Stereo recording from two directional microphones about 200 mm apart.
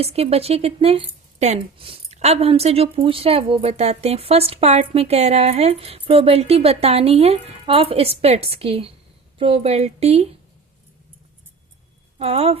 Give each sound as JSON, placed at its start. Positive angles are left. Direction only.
{"t": 0.0, "sound": "speech", "side_deg": -30}
{"t": 12.2, "sound": "speech", "side_deg": -30}